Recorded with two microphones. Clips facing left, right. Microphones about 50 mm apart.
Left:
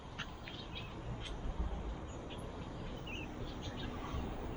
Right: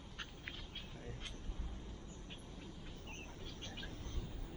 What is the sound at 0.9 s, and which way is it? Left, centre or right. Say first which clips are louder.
Duck: left 4 dB; left.